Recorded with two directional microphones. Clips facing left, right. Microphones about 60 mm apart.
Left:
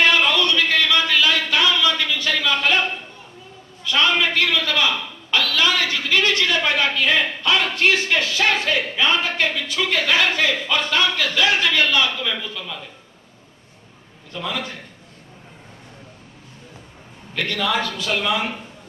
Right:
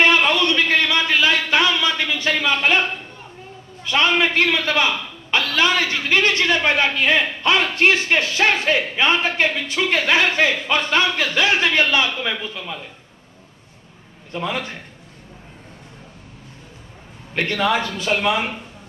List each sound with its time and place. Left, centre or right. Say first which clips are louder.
0.0 s a sound: right 1 dB; right
3.8 s a man's voice: right 1 dB; right
14.3 s a man's voice: right 3 dB; right
17.3 s a man's voice: right 3 dB; right